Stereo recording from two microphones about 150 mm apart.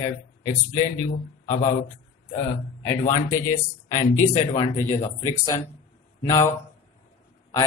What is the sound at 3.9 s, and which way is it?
Speech, 35° left (ahead or behind).